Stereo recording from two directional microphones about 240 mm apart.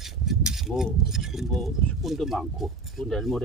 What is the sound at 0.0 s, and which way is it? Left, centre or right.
Speech, centre.